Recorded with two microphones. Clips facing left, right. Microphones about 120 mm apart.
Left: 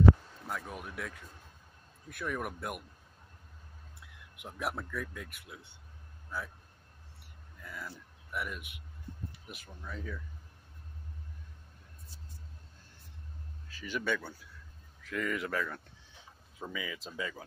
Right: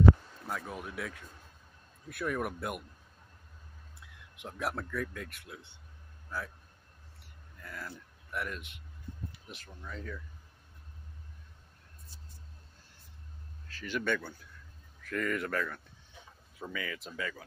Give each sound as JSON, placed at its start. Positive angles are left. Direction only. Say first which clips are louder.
{"t": 0.5, "sound": "speech", "louder": "right 1 dB", "side_deg": 0}
{"t": 4.4, "sound": "speech", "louder": "right 1 dB", "side_deg": 5}
{"t": 7.6, "sound": "speech", "louder": "right 1 dB", "side_deg": 0}
{"t": 13.7, "sound": "speech", "louder": "right 1 dB", "side_deg": 10}